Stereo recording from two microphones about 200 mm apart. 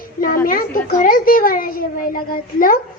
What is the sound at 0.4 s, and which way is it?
A woman's voice, 45° left (ahead or behind).